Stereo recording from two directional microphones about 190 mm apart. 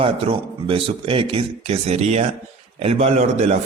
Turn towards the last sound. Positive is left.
turn(degrees=-35)  # may be behind; listen again after turning